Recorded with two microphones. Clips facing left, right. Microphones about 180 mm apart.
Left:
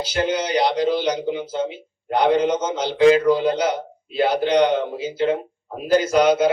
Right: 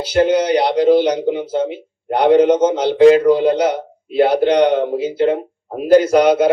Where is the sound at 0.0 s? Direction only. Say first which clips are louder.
Right 8 dB; 60° right (ahead or behind).